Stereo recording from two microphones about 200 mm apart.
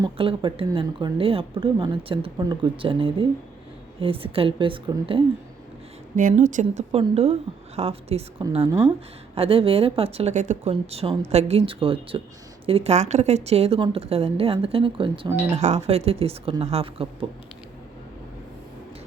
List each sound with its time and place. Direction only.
0.0 s speech: 25° right (ahead or behind)
6.1 s speech: 40° right (ahead or behind)